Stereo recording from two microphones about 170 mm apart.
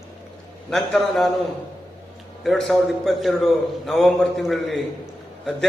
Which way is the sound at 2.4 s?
Centre (ahead or behind).